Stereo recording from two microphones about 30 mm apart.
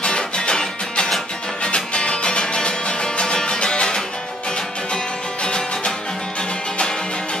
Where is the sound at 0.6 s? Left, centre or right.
Centre.